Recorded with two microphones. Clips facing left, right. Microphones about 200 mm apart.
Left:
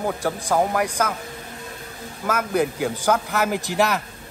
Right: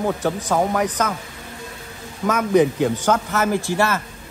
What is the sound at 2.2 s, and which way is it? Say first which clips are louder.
A woman's voice: right 5 dB; 10° left (ahead or behind).